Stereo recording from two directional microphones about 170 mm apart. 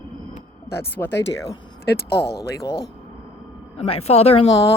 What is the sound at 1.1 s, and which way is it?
Speech, 90° left.